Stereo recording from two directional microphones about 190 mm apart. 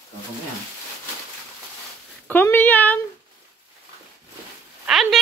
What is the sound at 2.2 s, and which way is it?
Speech, 10° left (ahead or behind).